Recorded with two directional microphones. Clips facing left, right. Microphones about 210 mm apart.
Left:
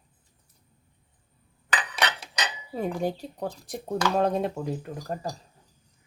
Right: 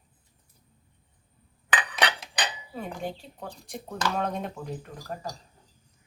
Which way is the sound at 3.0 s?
40° left (ahead or behind).